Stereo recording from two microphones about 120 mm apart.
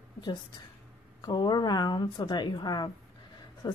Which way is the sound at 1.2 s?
35° left (ahead or behind).